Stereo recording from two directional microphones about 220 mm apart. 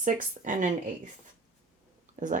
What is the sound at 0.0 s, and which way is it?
Speech, 35° right (ahead or behind).